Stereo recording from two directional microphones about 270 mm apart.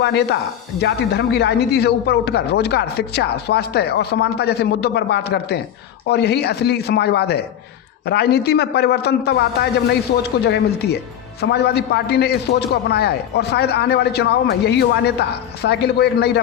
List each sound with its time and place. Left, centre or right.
0.0 s speech: left